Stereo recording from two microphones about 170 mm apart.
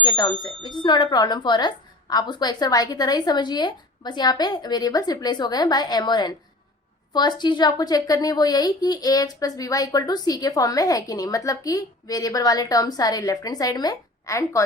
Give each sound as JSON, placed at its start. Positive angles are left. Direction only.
{"t": 0.0, "sound": "a woman's voice", "side_deg": 25}